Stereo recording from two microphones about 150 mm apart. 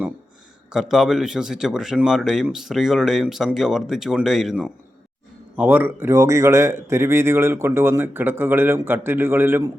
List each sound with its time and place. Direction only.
0.7 s speech: 5° right (ahead or behind)